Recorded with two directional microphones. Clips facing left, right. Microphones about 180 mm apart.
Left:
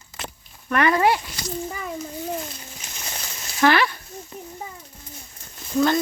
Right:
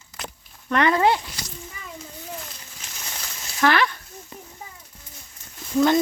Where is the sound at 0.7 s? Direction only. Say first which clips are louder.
Even; 20° right (ahead or behind).